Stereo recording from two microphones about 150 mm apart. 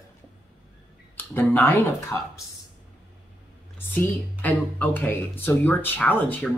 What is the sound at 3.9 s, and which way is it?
Speech, 10° left (ahead or behind).